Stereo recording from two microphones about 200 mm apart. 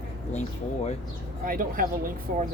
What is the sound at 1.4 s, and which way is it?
Speech, 45° right (ahead or behind).